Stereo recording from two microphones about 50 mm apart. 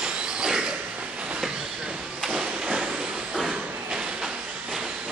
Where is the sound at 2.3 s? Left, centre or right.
Centre.